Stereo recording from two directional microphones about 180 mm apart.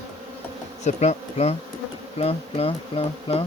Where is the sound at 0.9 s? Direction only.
40° left (ahead or behind).